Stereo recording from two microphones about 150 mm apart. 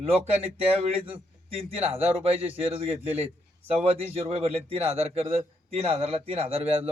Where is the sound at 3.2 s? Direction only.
40° right (ahead or behind).